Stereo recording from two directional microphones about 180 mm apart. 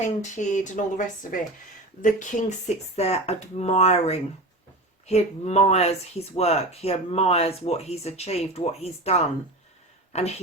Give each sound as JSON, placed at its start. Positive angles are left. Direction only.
{"t": 0.0, "sound": "speech", "side_deg": 40}